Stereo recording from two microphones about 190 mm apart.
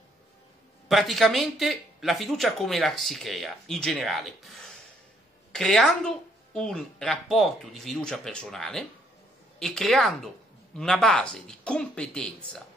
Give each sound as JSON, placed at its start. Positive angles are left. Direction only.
{"t": 0.8, "sound": "speech", "side_deg": 0}